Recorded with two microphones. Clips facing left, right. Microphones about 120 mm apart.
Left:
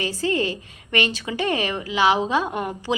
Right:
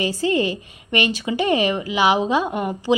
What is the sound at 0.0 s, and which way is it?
A woman's voice, 15° right (ahead or behind).